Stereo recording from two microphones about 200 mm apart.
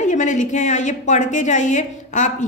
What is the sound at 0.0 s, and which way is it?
A woman's voice, 40° left (ahead or behind).